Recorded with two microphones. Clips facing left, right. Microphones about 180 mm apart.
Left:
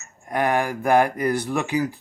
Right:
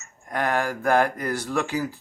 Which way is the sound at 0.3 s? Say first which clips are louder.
Left 3 dB; 15° left (ahead or behind).